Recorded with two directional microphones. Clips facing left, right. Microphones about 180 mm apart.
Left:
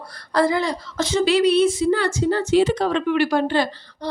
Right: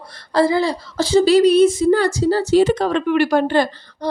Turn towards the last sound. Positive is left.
turn(degrees=-50)  # may be behind; listen again after turning